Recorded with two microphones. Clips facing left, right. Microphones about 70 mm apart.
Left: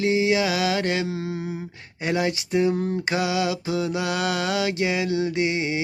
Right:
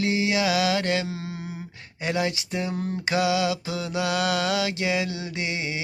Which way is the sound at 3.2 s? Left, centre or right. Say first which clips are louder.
Right 3 dB; left.